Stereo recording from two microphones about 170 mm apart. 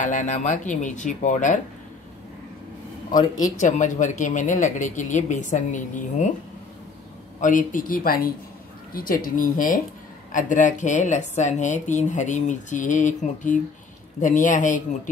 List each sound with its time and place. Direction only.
0.0 s a woman's voice: 45° left (ahead or behind)
3.3 s a woman's voice: 45° left (ahead or behind)
7.3 s a woman's voice: 50° left (ahead or behind)